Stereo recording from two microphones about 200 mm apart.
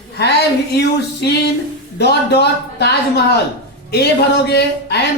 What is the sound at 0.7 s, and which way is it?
A woman's voice, 55° left (ahead or behind).